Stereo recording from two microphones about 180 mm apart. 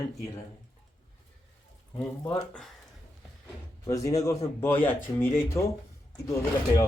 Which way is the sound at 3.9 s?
20° left (ahead or behind).